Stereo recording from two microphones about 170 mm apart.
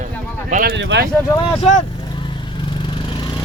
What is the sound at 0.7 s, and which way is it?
Speech, 90° right.